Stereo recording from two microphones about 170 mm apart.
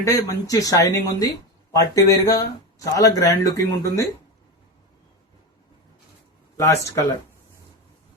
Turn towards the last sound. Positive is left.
turn(degrees=15)  # may be behind; listen again after turning